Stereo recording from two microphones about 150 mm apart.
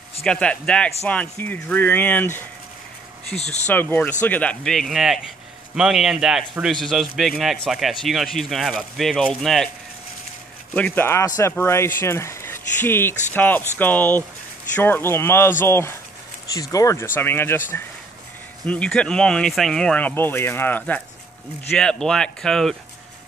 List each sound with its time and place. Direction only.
0.2 s speech: 5° left (ahead or behind)
3.3 s speech: 45° left (ahead or behind)
3.6 s speech: 15° left (ahead or behind)
10.7 s speech: 10° left (ahead or behind)